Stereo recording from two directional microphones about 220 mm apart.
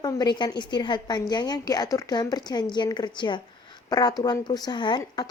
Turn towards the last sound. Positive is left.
turn(degrees=20)  # may be behind; listen again after turning